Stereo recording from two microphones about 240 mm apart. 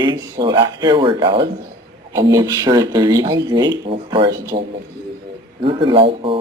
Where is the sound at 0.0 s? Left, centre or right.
Centre.